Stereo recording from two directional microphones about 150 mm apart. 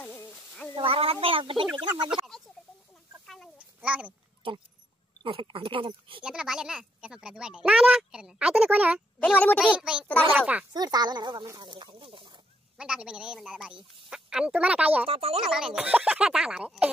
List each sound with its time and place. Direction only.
0.0 s a sound: 10° left (ahead or behind)
0.7 s a sound: 35° right (ahead or behind)
1.2 s speech: 35° right (ahead or behind)
2.0 s a sound: centre (ahead or behind)
3.5 s a sound: 10° right (ahead or behind)
5.2 s speech: 35° right (ahead or behind)
6.2 s speech: 5° right (ahead or behind)
9.2 s speech: 10° left (ahead or behind)
9.8 s a woman's voice: 5° right (ahead or behind)
10.7 s speech: 25° right (ahead or behind)
12.7 s a woman's voice: 5° right (ahead or behind)
15.0 s speech: 40° right (ahead or behind)
15.4 s speech: 5° right (ahead or behind)